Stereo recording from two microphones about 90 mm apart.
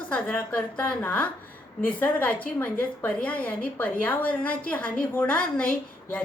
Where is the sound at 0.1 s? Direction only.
10° left (ahead or behind).